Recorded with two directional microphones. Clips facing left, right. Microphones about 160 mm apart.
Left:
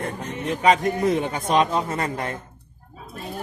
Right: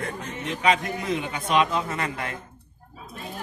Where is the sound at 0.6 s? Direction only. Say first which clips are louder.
Left 5 dB; 40° left (ahead or behind).